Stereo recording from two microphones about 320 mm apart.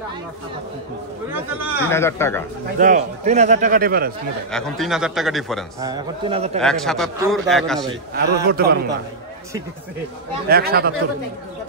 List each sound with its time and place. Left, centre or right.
1.3 s a man's voice: centre
1.9 s speech: centre
2.8 s a man's voice: right
4.5 s a man's voice: centre
5.8 s a man's voice: centre
6.6 s a man's voice: centre
8.1 s a man's voice: right
10.5 s a man's voice: right